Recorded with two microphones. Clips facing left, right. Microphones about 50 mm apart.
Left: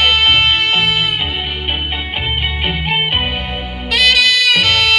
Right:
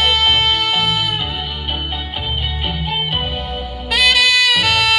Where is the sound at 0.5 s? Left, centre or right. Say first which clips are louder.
Left 3 dB; left.